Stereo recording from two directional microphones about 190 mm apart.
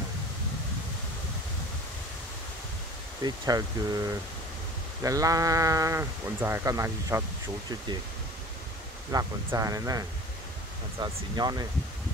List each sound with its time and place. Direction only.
3.3 s speech: 20° right (ahead or behind)
5.0 s speech: 20° right (ahead or behind)
9.1 s speech: 15° right (ahead or behind)